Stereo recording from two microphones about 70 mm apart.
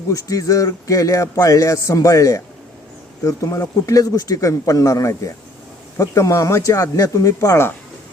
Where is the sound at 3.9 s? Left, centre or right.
Left.